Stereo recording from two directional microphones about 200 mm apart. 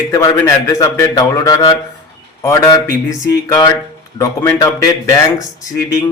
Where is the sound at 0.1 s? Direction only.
15° left (ahead or behind).